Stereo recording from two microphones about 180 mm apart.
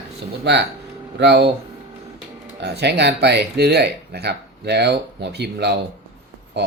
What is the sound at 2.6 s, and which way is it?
Speech, 70° right (ahead or behind).